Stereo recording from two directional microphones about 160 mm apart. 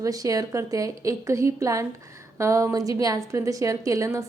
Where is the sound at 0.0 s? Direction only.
20° right (ahead or behind).